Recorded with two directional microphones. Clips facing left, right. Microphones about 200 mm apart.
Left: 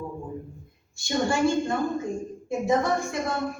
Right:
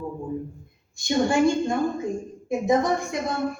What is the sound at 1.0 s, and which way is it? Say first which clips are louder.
A man's voice: right 3 dB; 15° right (ahead or behind).